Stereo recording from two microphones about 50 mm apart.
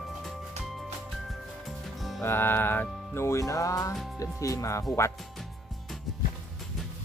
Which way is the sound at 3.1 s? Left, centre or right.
Left.